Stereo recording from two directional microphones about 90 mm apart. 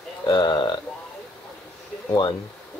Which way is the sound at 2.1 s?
55° left (ahead or behind).